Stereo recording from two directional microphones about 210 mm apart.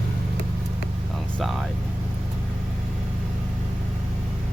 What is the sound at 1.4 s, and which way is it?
Speech, centre (ahead or behind).